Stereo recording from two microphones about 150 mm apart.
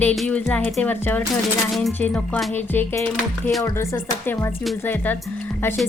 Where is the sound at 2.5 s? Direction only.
15° left (ahead or behind).